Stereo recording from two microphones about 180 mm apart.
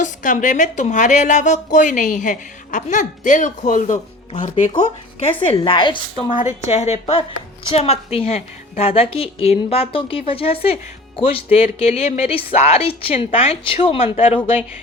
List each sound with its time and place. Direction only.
0.0 s a woman's voice: 45° left (ahead or behind)
5.5 s speech: 25° left (ahead or behind)
6.3 s a woman's voice: 40° left (ahead or behind)